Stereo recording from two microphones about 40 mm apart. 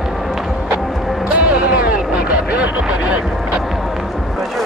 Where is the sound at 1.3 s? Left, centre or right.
Right.